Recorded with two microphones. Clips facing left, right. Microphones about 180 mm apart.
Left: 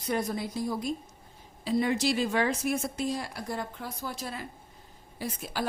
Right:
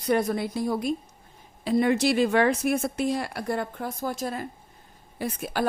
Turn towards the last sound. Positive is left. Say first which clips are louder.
# right 5 dB
turn(degrees=-60)  # may be behind; listen again after turning